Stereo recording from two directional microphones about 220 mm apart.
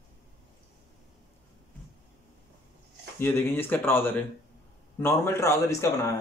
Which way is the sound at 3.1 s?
10° left (ahead or behind).